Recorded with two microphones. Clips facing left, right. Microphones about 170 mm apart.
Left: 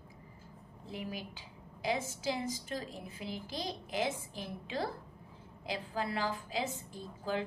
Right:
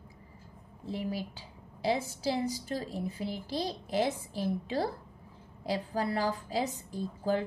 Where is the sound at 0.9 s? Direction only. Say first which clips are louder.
Right 6 dB; 35° right (ahead or behind).